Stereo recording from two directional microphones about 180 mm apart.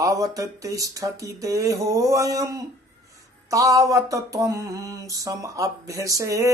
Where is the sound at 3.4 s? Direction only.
20° right (ahead or behind).